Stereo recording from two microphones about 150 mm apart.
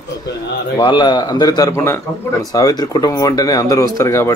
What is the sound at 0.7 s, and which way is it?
A man's voice, 30° left (ahead or behind).